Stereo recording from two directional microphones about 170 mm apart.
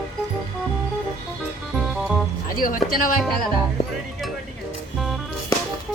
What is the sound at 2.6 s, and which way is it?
Speech, 55° left (ahead or behind).